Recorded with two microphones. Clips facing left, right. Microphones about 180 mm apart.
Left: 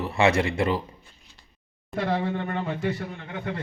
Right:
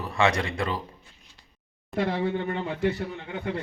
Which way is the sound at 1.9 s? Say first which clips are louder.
Right 2 dB; centre (ahead or behind).